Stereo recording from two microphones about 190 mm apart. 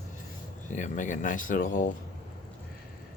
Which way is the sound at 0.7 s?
40° left (ahead or behind).